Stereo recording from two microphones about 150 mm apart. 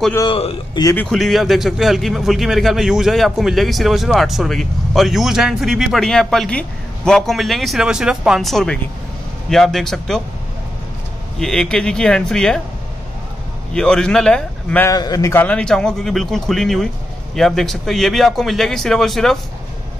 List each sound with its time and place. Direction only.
0.3 s a man's voice: 40° left (ahead or behind)
0.9 s a man's voice: 5° left (ahead or behind)
11.3 s a man's voice: 5° left (ahead or behind)
13.7 s a man's voice: 5° left (ahead or behind)
14.9 s a man's voice: 25° left (ahead or behind)
15.4 s a man's voice: 5° left (ahead or behind)